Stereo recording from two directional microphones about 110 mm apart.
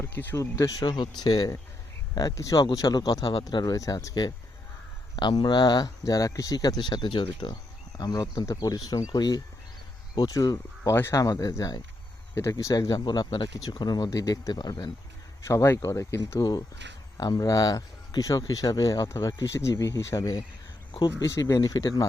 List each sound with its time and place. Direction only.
0.0 s a sound: 15° left (ahead or behind)
0.3 s speech: 30° left (ahead or behind)
15.4 s speech: 25° left (ahead or behind)